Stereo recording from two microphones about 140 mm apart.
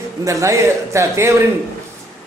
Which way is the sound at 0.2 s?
20° right (ahead or behind).